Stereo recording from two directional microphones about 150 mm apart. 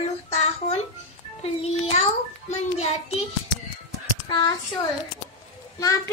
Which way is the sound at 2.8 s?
40° left (ahead or behind).